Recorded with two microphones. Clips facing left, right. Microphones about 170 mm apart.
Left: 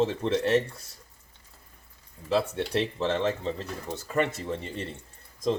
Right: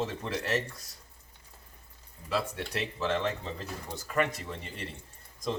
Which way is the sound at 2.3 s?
25° left (ahead or behind).